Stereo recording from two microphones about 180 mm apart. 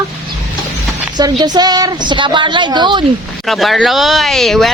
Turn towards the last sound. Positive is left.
turn(degrees=0)  # may be behind; listen again after turning